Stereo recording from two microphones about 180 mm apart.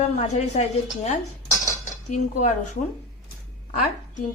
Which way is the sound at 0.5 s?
35° left (ahead or behind).